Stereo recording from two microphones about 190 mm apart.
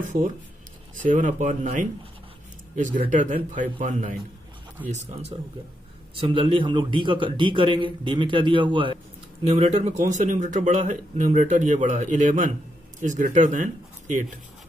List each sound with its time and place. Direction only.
1.0 s a man's voice: 40° right (ahead or behind)